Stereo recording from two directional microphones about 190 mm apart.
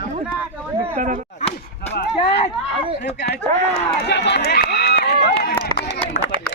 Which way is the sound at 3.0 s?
60° left (ahead or behind).